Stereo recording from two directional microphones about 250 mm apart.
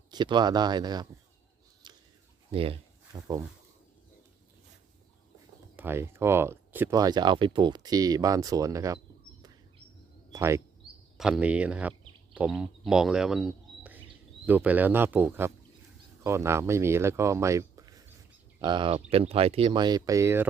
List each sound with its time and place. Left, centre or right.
0.1 s speech: centre
1.8 s a sound: centre
2.5 s speech: right
5.7 s speech: centre
10.3 s speech: centre